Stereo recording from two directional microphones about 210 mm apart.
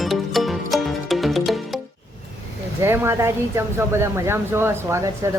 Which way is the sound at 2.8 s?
10° right (ahead or behind).